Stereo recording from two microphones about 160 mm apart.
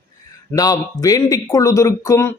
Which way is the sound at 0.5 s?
20° left (ahead or behind).